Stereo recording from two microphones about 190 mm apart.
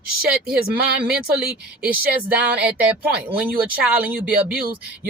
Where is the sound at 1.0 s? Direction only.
5° right (ahead or behind).